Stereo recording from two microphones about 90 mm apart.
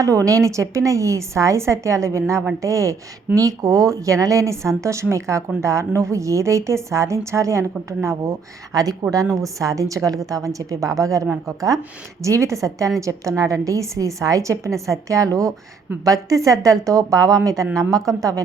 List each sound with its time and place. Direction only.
0.0 s a woman's voice: 35° right (ahead or behind)